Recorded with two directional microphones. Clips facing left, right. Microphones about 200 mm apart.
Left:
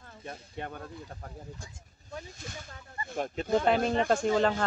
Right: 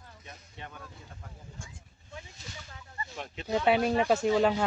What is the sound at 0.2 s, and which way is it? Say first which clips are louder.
Speech: left 9 dB; 50° left (ahead or behind).